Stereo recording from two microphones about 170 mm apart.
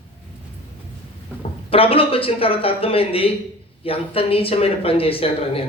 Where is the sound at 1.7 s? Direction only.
35° left (ahead or behind).